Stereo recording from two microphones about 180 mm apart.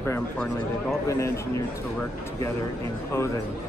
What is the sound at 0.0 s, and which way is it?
A man's voice, 10° left (ahead or behind).